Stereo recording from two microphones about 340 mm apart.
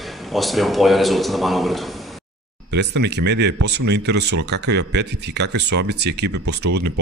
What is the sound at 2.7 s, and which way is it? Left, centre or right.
Speech, right.